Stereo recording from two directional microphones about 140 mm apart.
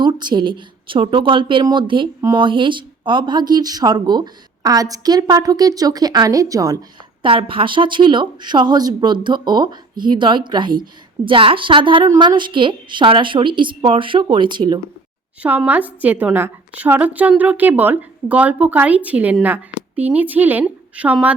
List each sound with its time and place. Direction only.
0.0 s speech: 30° right (ahead or behind)
7.2 s speech: 40° right (ahead or behind)
15.4 s a woman's voice: 15° right (ahead or behind)